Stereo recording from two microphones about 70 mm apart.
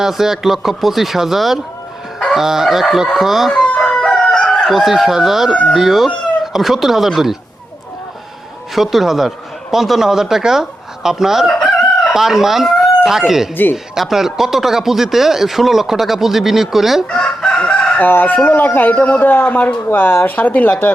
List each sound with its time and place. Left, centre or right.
0.0 s speech: centre
3.7 s crowing: centre
4.7 s speech: centre
8.7 s speech: centre
17.1 s chicken: centre
18.0 s speech: left